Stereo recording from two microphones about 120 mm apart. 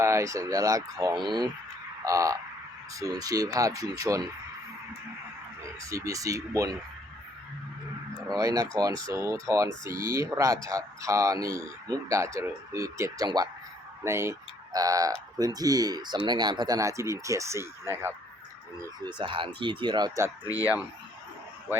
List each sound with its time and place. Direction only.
0.0 s speech: 25° right (ahead or behind)
2.0 s speech: 25° right (ahead or behind)
5.8 s speech: 30° right (ahead or behind)
8.3 s speech: 30° right (ahead or behind)
14.0 s speech: 20° right (ahead or behind)
18.9 s speech: 40° right (ahead or behind)
20.4 s speech: 30° left (ahead or behind)